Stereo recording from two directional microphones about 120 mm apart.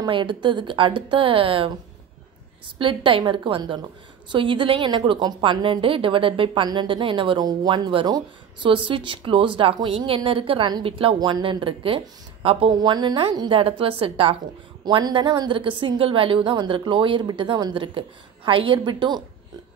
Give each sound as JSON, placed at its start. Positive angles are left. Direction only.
{"t": 0.0, "sound": "a woman's voice", "side_deg": -40}
{"t": 2.8, "sound": "a woman's voice", "side_deg": -45}
{"t": 11.1, "sound": "a woman's voice", "side_deg": -40}
{"t": 12.7, "sound": "a woman's voice", "side_deg": -40}